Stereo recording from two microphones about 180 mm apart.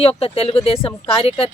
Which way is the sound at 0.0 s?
35° left (ahead or behind).